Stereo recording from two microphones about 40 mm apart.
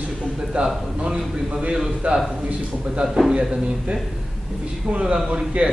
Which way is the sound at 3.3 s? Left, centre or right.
Right.